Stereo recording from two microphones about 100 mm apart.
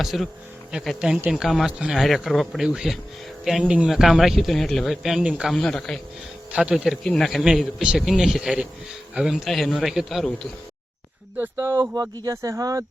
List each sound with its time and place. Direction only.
0.0 s a man's voice: centre (ahead or behind)
6.5 s a man's voice: 10° right (ahead or behind)
11.3 s speech: 20° right (ahead or behind)